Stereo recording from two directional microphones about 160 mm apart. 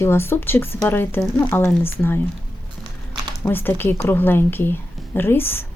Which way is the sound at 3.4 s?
15° left (ahead or behind).